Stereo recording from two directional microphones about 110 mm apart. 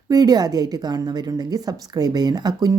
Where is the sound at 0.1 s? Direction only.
35° right (ahead or behind).